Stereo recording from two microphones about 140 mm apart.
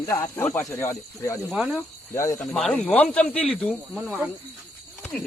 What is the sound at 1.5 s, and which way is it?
Speech, 5° right (ahead or behind).